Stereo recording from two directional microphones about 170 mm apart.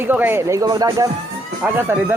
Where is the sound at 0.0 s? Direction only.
10° right (ahead or behind).